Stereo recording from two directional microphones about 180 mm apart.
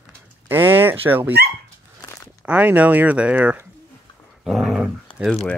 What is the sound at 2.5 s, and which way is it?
Speech, 10° right (ahead or behind).